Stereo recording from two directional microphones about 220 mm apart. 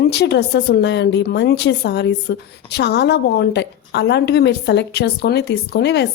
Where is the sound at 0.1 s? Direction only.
50° left (ahead or behind).